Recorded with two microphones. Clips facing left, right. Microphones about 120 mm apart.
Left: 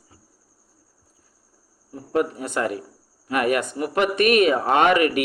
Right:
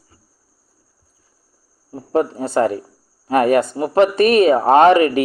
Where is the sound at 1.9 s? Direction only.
30° right (ahead or behind).